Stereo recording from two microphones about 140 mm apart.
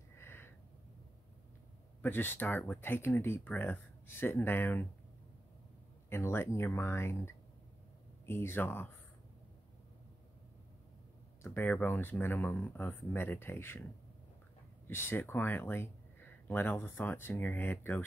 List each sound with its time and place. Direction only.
0.1 s a sound: 15° left (ahead or behind)
2.0 s speech: 15° left (ahead or behind)
6.0 s speech: 15° left (ahead or behind)
11.4 s speech: 15° left (ahead or behind)
14.9 s speech: 15° left (ahead or behind)